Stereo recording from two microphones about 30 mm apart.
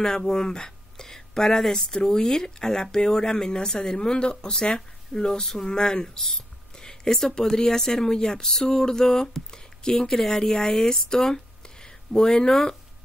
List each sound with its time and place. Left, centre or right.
0.0 s speech: left